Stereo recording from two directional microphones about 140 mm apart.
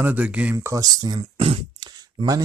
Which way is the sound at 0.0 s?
10° right (ahead or behind).